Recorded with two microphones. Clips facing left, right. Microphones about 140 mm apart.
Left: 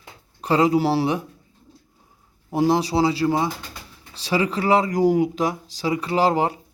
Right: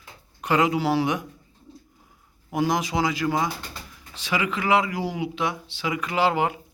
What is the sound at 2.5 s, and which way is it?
Speech, 30° left (ahead or behind).